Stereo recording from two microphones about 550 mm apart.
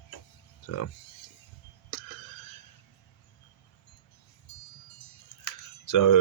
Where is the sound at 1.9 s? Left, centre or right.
Left.